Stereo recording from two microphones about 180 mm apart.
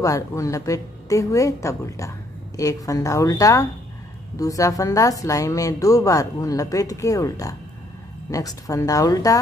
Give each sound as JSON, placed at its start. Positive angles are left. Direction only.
{"t": 0.0, "sound": "a woman's voice", "side_deg": 20}